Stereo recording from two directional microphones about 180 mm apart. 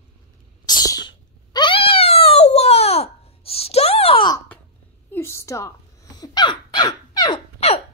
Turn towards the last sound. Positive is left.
turn(degrees=30)  # may be behind; listen again after turning